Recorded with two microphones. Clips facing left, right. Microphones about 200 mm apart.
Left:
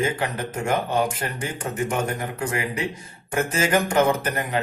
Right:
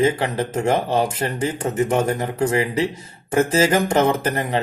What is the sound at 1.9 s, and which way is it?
Speech, 30° right (ahead or behind).